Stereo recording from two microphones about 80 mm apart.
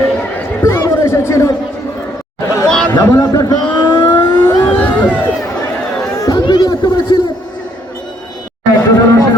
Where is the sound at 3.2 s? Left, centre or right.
Left.